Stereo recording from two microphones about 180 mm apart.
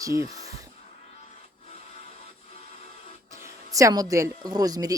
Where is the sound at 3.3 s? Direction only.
15° right (ahead or behind).